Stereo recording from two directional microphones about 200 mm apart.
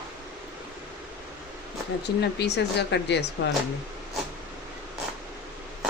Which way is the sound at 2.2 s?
55° left (ahead or behind).